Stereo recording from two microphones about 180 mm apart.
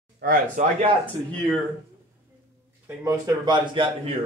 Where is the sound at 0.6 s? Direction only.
45° right (ahead or behind).